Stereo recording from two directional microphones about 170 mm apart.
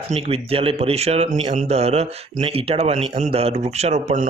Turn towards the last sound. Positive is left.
turn(degrees=-40)  # may be behind; listen again after turning